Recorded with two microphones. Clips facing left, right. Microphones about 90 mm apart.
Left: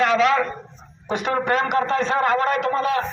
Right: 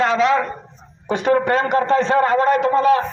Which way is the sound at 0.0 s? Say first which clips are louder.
Right 1 dB; 25° right (ahead or behind).